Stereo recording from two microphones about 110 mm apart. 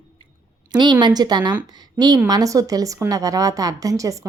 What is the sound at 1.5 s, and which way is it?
Speech, 15° right (ahead or behind).